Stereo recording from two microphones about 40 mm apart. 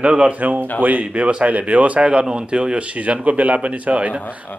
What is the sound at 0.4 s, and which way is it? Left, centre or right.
Speech, right.